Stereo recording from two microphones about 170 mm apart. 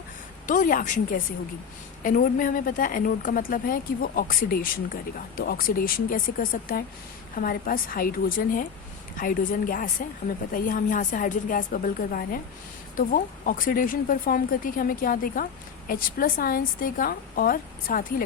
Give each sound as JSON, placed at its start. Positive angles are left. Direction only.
{"t": 0.4, "sound": "a woman's voice", "side_deg": 50}